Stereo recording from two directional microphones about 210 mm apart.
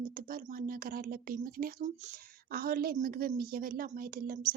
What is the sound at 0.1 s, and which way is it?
Speech, 40° right (ahead or behind).